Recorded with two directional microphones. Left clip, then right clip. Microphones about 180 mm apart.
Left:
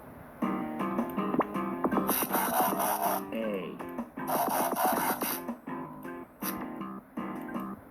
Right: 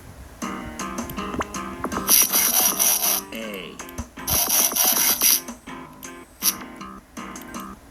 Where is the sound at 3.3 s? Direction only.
30° right (ahead or behind).